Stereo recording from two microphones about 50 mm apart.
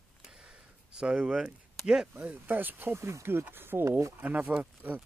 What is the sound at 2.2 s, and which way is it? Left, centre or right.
Speech, right.